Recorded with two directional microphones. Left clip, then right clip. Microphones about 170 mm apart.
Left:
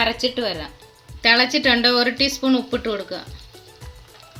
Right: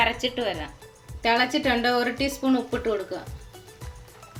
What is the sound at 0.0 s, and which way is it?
Speech, 45° left (ahead or behind).